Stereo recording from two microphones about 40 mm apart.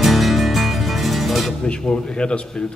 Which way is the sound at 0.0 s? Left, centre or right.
Centre.